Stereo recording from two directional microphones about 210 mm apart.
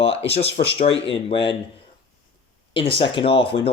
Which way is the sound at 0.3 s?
30° left (ahead or behind).